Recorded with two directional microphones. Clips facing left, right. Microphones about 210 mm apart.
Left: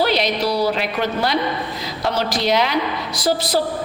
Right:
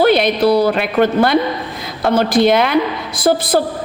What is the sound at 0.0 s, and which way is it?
A woman's voice, 55° right (ahead or behind).